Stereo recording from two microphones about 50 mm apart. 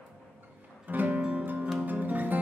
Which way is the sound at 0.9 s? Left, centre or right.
Right.